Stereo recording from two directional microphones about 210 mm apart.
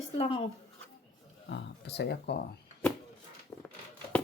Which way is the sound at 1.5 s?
55° left (ahead or behind).